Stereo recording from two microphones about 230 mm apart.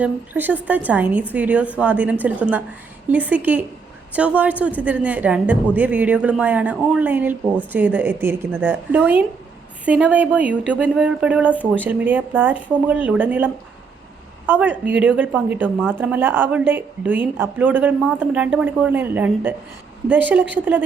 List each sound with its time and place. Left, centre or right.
0.0 s a woman's voice: centre